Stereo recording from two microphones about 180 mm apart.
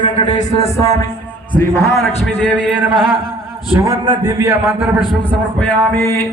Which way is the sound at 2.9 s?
5° left (ahead or behind).